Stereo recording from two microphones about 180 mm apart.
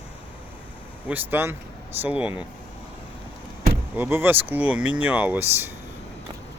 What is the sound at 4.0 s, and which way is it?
Speech, 10° right (ahead or behind).